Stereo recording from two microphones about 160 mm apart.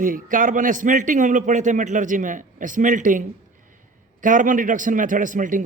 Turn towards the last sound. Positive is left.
turn(degrees=-55)  # may be behind; listen again after turning